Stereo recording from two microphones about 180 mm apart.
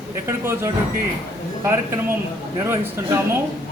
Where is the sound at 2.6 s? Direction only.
15° right (ahead or behind).